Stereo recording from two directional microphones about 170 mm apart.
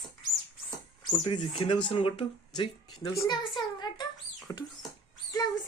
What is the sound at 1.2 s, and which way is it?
Speech, 30° left (ahead or behind).